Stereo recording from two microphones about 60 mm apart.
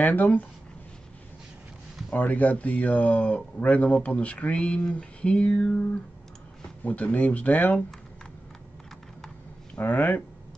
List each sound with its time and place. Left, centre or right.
0.0 s speech: left
2.1 s speech: left
6.8 s speech: left
9.8 s speech: left